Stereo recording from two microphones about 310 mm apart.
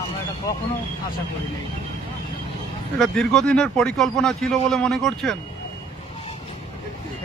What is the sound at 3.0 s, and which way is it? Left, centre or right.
Speech, centre.